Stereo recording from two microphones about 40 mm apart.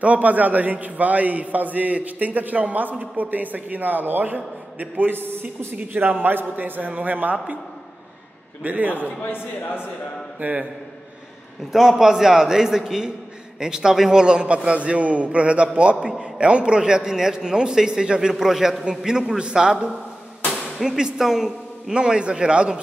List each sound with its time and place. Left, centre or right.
0.0 s a man's voice: right
5.1 s speech: right
5.9 s a man's voice: right
8.6 s a man's voice: right
9.2 s speech: left
10.4 s a man's voice: right
11.7 s a man's voice: centre
14.2 s a man's voice: right
21.9 s a man's voice: right